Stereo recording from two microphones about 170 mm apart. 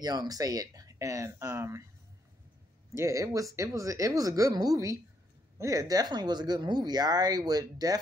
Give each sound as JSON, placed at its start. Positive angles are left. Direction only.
{"t": 0.0, "sound": "speech", "side_deg": -25}
{"t": 2.9, "sound": "speech", "side_deg": -15}